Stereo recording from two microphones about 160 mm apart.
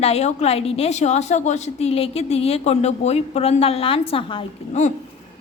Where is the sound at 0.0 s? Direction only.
40° left (ahead or behind).